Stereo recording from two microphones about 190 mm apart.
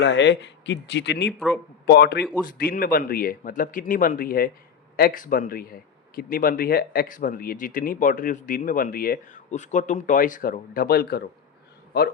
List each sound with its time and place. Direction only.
0.0 s speech: 65° left (ahead or behind)
1.3 s speech: centre (ahead or behind)
1.9 s speech: 60° left (ahead or behind)